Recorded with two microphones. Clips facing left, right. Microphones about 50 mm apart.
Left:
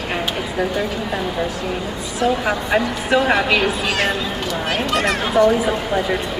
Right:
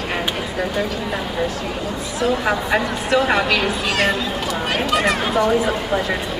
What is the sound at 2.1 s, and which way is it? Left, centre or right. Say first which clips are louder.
Speech: left 1 dB; centre.